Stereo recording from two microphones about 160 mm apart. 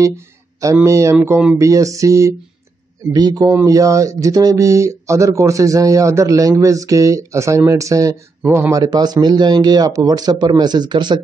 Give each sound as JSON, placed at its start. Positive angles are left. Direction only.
{"t": 0.0, "sound": "speech", "side_deg": -20}